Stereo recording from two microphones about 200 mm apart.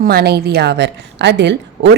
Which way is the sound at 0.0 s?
50° right (ahead or behind).